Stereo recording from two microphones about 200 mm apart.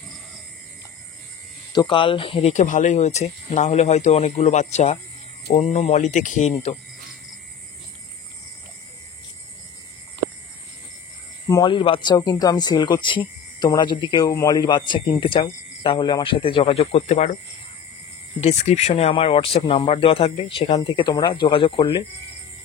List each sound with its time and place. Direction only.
1.7 s speech: 25° left (ahead or behind)
11.6 s speech: 25° left (ahead or behind)
18.4 s speech: 35° left (ahead or behind)